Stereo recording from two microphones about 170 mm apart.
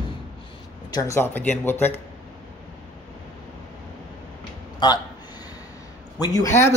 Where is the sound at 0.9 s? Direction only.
20° left (ahead or behind).